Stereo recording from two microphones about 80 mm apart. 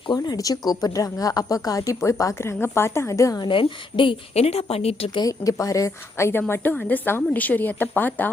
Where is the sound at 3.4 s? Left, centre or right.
Left.